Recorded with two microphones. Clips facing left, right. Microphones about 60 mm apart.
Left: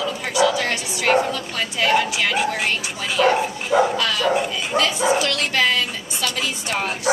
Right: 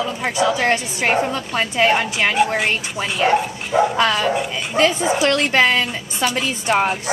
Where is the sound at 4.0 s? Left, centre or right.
Right.